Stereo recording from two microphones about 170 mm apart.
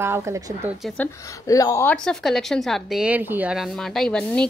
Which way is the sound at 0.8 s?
10° left (ahead or behind).